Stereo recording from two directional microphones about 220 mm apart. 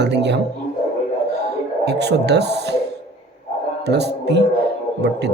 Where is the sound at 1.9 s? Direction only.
50° right (ahead or behind).